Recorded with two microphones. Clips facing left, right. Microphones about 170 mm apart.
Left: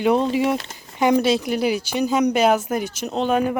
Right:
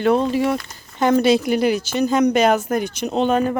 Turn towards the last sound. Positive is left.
turn(degrees=5)  # may be behind; listen again after turning